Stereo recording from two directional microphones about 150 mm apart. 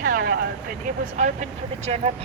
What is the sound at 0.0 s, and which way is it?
Vehicle, 80° right.